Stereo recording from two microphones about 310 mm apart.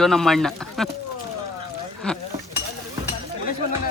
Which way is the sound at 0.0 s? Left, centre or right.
Centre.